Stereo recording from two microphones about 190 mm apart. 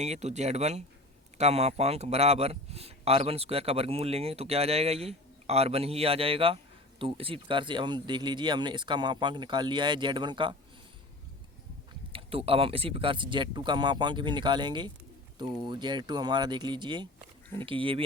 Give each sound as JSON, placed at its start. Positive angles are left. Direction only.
{"t": 0.0, "sound": "a man's voice", "side_deg": -35}
{"t": 12.1, "sound": "speech", "side_deg": -30}